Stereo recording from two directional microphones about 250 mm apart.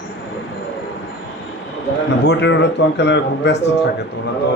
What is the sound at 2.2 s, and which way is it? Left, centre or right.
A man's voice, left.